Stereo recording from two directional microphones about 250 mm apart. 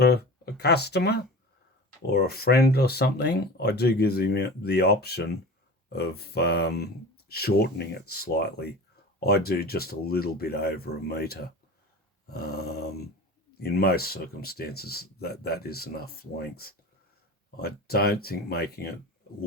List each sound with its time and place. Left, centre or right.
0.0 s speech: left